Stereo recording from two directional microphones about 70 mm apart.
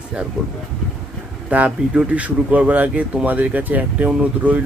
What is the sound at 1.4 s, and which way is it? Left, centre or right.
Speech, centre.